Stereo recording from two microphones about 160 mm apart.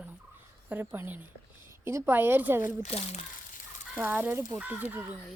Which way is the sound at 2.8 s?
45° left (ahead or behind).